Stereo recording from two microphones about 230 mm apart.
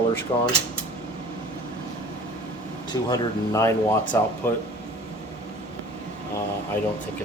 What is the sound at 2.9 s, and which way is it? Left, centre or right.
Speech, centre.